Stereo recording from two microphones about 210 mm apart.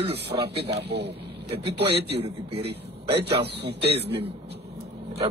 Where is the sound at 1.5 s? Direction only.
25° right (ahead or behind).